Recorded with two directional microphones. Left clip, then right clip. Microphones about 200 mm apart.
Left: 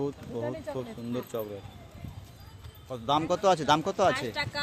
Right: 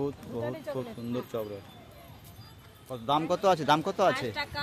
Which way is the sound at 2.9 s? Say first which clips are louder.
Left 1 dB; 5° left (ahead or behind).